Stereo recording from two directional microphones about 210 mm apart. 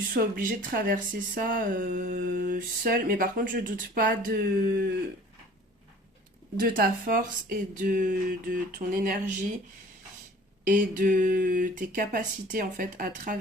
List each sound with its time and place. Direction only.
0.1 s speech: 40° right (ahead or behind)
6.6 s speech: 40° right (ahead or behind)
10.7 s speech: 40° right (ahead or behind)